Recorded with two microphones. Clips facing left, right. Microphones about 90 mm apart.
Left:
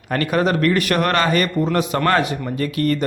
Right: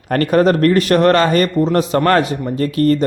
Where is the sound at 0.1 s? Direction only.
40° right (ahead or behind).